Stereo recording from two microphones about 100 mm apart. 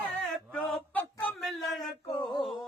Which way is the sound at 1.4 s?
Centre (ahead or behind).